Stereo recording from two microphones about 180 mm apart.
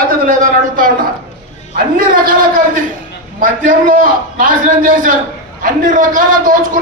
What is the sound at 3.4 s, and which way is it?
A man's voice, 50° right (ahead or behind).